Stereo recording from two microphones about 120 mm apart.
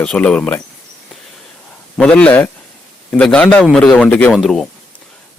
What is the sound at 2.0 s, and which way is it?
A man's voice, 10° left (ahead or behind).